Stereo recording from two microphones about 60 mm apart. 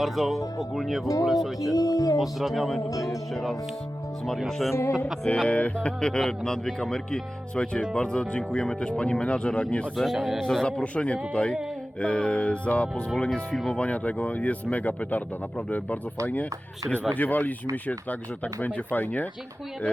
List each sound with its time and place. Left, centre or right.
0.0 s speech: centre
1.7 s speech: left
2.1 s speech: centre
2.9 s music: left
4.4 s speech: centre
4.7 s speech: left
5.5 s speech: left
10.0 s speech: centre
10.4 s speech: centre
13.5 s speech: centre
13.7 s speech: left
16.2 s speech: left